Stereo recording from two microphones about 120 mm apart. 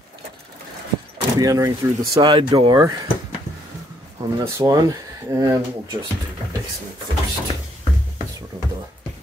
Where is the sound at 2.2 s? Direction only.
40° right (ahead or behind).